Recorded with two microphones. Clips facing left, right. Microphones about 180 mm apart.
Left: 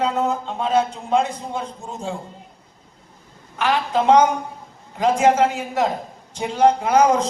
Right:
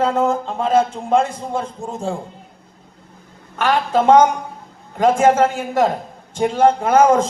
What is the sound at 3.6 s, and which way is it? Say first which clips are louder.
Speech: right 3 dB; 50° right (ahead or behind).